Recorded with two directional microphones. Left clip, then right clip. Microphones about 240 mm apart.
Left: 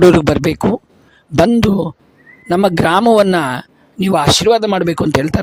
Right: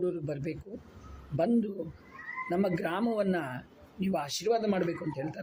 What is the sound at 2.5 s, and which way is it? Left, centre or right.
Speech, left.